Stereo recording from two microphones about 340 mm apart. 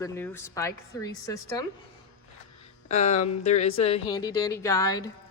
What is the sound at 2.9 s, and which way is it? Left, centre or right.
A woman's voice, centre.